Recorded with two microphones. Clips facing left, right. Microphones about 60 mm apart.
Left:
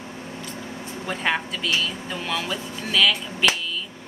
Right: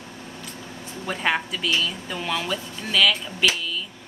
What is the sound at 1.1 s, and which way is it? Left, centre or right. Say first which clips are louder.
A woman's voice: right 1 dB; centre.